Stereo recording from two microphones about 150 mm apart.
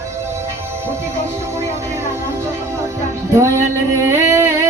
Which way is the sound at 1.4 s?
20° right (ahead or behind).